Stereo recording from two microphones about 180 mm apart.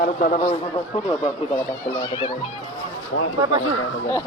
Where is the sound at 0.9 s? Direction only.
30° left (ahead or behind).